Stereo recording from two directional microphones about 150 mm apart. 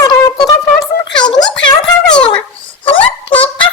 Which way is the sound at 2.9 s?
35° left (ahead or behind).